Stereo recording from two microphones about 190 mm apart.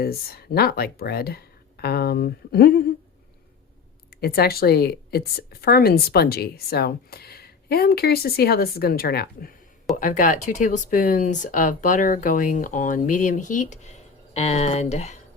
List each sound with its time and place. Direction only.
0.0 s speech: 55° left (ahead or behind)
4.1 s speech: 55° left (ahead or behind)
9.9 s speech: 45° left (ahead or behind)